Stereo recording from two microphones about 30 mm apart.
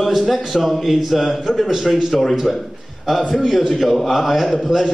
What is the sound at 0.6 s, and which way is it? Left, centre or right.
A man's voice, centre.